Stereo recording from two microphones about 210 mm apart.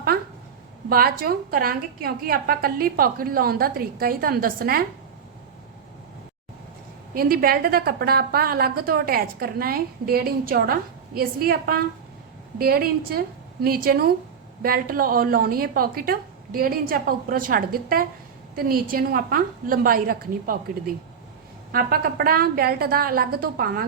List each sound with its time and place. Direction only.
0.9 s a woman's voice: 45° right (ahead or behind)
7.1 s a woman's voice: 45° right (ahead or behind)